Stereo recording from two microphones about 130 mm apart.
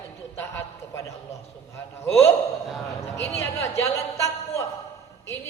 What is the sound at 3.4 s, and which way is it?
A man's voice, 20° left (ahead or behind).